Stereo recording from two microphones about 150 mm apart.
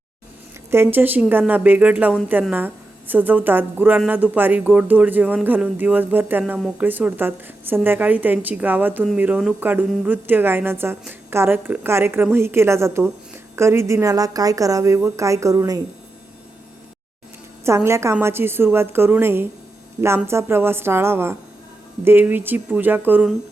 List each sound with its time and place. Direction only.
0.7 s a woman's voice: 15° right (ahead or behind)
17.7 s a woman's voice: 20° right (ahead or behind)